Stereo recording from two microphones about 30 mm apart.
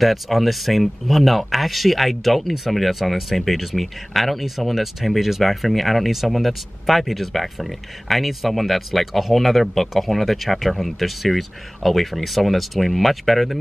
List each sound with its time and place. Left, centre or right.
0.0 s speech: centre